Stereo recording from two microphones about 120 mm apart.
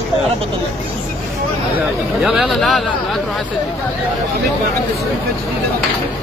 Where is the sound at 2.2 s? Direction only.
Centre (ahead or behind).